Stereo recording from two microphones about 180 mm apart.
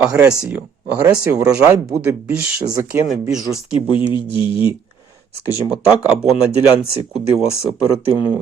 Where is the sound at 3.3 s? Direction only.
5° right (ahead or behind).